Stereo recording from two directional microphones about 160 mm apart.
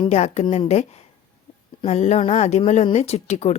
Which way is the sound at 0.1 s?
45° left (ahead or behind).